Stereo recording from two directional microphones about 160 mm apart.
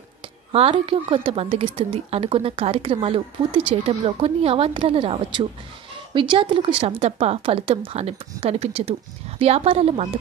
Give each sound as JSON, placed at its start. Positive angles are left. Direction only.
{"t": 0.5, "sound": "a woman's voice", "side_deg": -35}